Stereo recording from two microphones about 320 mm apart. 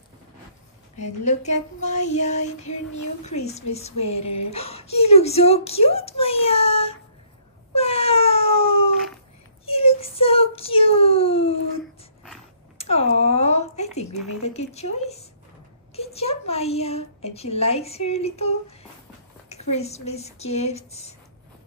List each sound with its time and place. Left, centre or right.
0.9 s a woman's voice: left
3.0 s speech: left
3.4 s a woman's voice: centre
7.7 s wail: centre
9.7 s child singing: centre
12.7 s a sound: centre
14.4 s a woman's voice: centre